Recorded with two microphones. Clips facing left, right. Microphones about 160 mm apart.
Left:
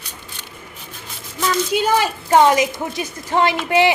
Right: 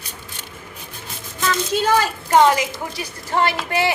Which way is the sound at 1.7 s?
15° left (ahead or behind).